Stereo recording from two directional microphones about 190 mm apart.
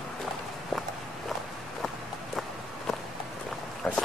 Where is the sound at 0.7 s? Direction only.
Centre (ahead or behind).